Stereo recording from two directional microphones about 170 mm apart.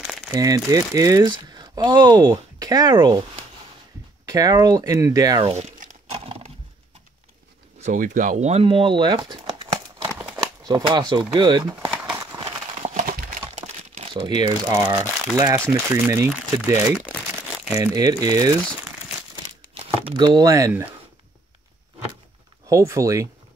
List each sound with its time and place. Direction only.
0.3 s speech: 20° right (ahead or behind)
4.3 s speech: 20° right (ahead or behind)
5.6 s crumpling: 45° right (ahead or behind)
7.8 s speech: 50° right (ahead or behind); by 11.2 s 25° right (ahead or behind)
11.3 s a sound: 25° right (ahead or behind)
12.9 s crumpling: 55° right (ahead or behind)
14.1 s speech: 25° right (ahead or behind)
19.8 s speech: 30° right (ahead or behind); by 20.9 s 15° right (ahead or behind)
22.7 s speech: 20° right (ahead or behind)